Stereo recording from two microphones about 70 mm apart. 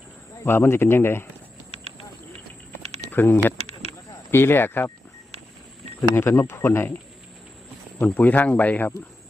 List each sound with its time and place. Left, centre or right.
0.4 s speech: left
3.1 s speech: left
6.0 s speech: left
7.9 s speech: left